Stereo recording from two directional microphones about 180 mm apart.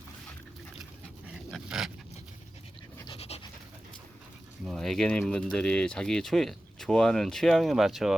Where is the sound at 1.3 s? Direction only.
5° right (ahead or behind).